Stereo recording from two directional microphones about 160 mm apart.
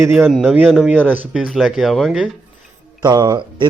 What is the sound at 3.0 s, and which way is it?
Speech, 20° right (ahead or behind).